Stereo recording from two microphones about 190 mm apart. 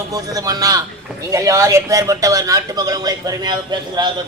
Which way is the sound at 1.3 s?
15° right (ahead or behind).